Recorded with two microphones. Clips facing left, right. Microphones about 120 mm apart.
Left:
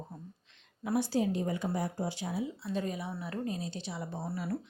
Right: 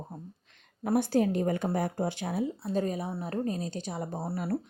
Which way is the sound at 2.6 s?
40° right (ahead or behind).